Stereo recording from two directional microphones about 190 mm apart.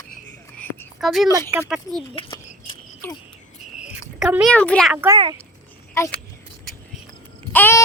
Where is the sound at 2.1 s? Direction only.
25° left (ahead or behind).